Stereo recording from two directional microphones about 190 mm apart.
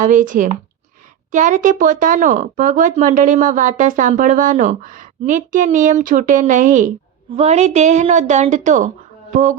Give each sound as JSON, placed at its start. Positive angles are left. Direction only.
{"t": 0.0, "sound": "a woman's voice", "side_deg": -40}
{"t": 9.3, "sound": "mantra", "side_deg": -40}